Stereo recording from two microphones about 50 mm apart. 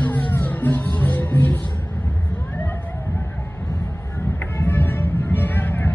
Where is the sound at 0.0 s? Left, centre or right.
Left.